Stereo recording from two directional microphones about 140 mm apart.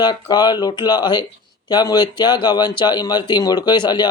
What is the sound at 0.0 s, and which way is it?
Speech, 30° left (ahead or behind).